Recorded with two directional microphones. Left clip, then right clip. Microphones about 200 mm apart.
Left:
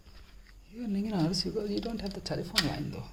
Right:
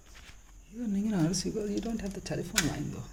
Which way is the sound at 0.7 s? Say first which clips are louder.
Right 1 dB; centre (ahead or behind).